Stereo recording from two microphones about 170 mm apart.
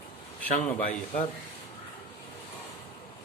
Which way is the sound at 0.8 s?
55° left (ahead or behind).